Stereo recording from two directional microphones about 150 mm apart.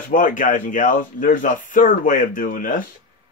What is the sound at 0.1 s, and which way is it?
Speech, 60° left (ahead or behind).